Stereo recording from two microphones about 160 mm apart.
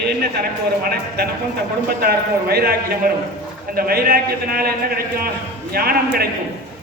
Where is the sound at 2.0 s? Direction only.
75° right (ahead or behind).